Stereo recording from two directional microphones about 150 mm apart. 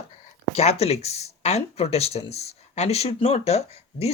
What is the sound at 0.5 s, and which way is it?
Speech, 45° left (ahead or behind).